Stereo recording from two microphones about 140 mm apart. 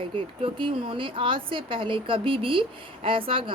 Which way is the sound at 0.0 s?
40° right (ahead or behind).